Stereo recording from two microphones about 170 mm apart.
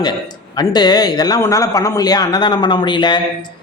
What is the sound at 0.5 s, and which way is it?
A man's voice, 25° left (ahead or behind).